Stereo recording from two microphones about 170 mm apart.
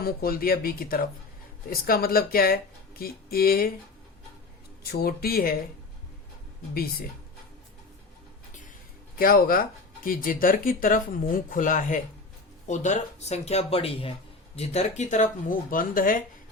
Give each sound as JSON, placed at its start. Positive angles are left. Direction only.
{"t": 0.0, "sound": "speech", "side_deg": 60}
{"t": 4.8, "sound": "speech", "side_deg": 65}
{"t": 9.1, "sound": "speech", "side_deg": 60}